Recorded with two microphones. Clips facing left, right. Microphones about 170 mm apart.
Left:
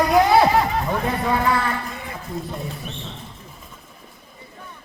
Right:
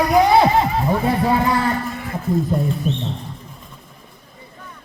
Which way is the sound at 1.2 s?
35° right (ahead or behind).